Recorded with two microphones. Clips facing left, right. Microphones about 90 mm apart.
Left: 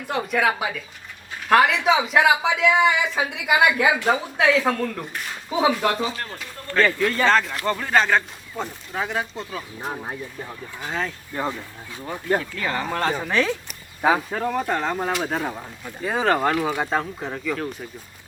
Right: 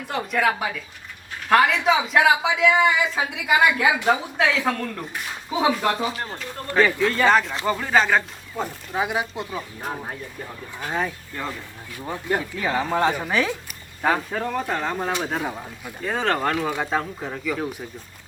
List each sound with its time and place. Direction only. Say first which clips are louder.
0.1 s a woman's voice: left 1 dB; centre (ahead or behind)
6.2 s speech: right 3 dB; 15° right (ahead or behind)
7.6 s a woman's voice: even; 5° right (ahead or behind)
10.8 s speech: right 2 dB; 10° right (ahead or behind)
11.3 s speech: left 8 dB; 15° left (ahead or behind)
12.4 s speech: right 2 dB; 15° right (ahead or behind)
14.0 s a woman's voice: left 2 dB; 5° left (ahead or behind)
16.0 s a woman's voice: left 2 dB; 5° left (ahead or behind)